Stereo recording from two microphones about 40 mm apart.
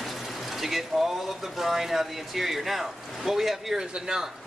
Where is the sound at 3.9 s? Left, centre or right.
Centre.